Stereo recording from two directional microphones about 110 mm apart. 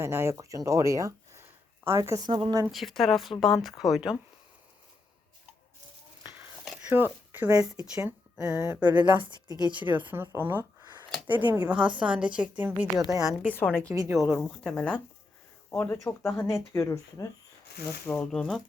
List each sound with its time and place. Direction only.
0.0 s speech: 25° right (ahead or behind)
2.6 s speech: centre (ahead or behind)
6.9 s a woman's voice: 15° right (ahead or behind)
9.1 s speech: 45° right (ahead or behind)
10.1 s a woman's voice: 20° right (ahead or behind)
13.4 s speech: 15° left (ahead or behind)
13.8 s a woman's voice: 30° right (ahead or behind)
14.1 s speech: centre (ahead or behind)
15.7 s speech: 20° left (ahead or behind)
18.0 s speech: 10° left (ahead or behind)